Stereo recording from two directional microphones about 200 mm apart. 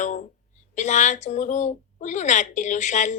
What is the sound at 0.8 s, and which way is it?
A woman's voice, 35° left (ahead or behind).